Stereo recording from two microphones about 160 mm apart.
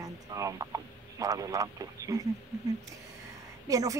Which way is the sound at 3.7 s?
20° right (ahead or behind).